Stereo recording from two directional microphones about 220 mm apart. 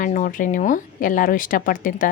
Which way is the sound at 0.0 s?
35° left (ahead or behind).